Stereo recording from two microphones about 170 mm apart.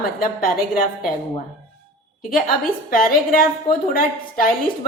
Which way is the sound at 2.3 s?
55° left (ahead or behind).